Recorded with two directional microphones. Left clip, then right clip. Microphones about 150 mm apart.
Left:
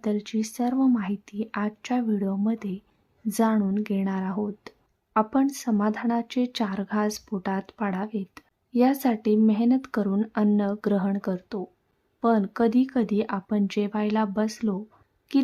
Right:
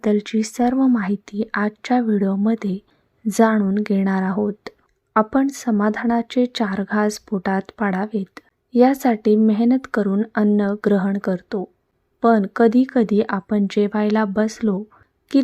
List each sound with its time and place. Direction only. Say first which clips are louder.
0.0 s speech: right 8 dB; 35° right (ahead or behind)